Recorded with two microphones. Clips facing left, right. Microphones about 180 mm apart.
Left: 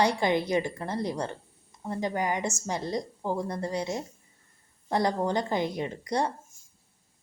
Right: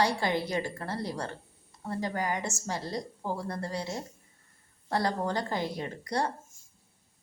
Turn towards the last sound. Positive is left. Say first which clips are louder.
# left 3 dB
turn(degrees=20)  # may be behind; listen again after turning